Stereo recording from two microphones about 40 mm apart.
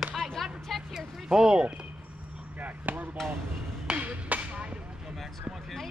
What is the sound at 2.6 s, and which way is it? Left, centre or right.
Chop, right.